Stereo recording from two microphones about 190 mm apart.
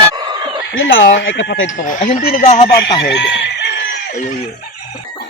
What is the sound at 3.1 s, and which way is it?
Speech, 70° left (ahead or behind).